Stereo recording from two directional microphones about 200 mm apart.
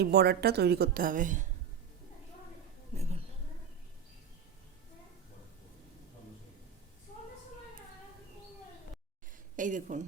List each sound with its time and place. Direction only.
0.0 s a woman's voice: 55° right (ahead or behind)
2.9 s a sound: 35° right (ahead or behind)
9.6 s speech: 40° right (ahead or behind)